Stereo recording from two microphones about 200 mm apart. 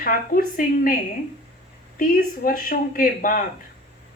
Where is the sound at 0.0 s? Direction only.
45° left (ahead or behind).